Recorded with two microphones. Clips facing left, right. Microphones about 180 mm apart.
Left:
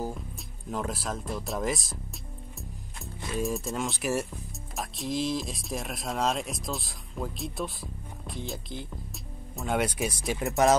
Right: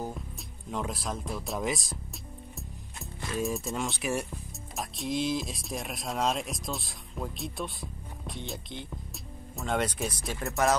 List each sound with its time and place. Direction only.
0.7 s speech: centre (ahead or behind)
3.2 s speech: centre (ahead or behind); by 10.8 s 20° left (ahead or behind)